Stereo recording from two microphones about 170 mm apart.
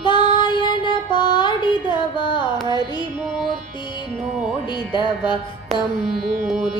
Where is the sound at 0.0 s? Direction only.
30° left (ahead or behind).